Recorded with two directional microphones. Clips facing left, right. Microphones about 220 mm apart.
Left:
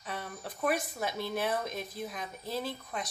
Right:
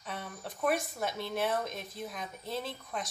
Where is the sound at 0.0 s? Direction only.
Centre (ahead or behind).